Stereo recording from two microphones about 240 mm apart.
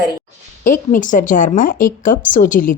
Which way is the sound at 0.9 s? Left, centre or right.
Left.